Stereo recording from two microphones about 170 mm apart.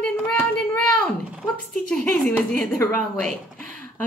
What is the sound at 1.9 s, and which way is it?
A woman's voice, 10° left (ahead or behind).